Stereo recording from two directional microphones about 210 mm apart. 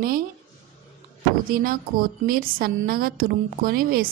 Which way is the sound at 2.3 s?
45° right (ahead or behind).